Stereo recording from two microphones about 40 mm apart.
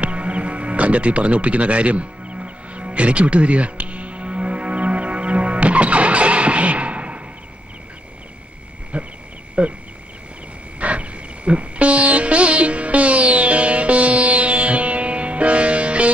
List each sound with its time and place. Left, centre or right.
0.0 s music: right
8.9 s a sound: right
9.6 s speech: right
10.8 s music: right